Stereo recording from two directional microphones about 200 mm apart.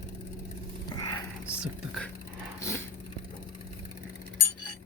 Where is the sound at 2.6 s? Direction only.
15° left (ahead or behind).